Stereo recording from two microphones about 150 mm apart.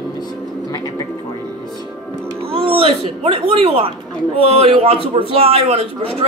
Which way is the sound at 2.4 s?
40° right (ahead or behind).